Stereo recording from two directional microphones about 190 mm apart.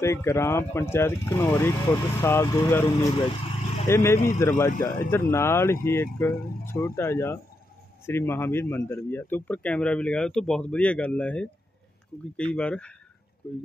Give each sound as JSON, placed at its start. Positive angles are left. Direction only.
{"t": 0.0, "sound": "speech", "side_deg": 15}
{"t": 3.2, "sound": "vehicle", "side_deg": 30}
{"t": 3.8, "sound": "speech", "side_deg": 15}
{"t": 12.5, "sound": "speech", "side_deg": 5}